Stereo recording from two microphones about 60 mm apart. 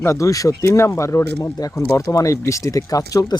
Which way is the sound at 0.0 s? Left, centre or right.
Left.